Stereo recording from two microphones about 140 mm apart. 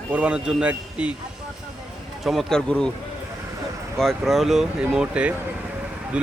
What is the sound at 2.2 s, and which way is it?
Speech, centre (ahead or behind).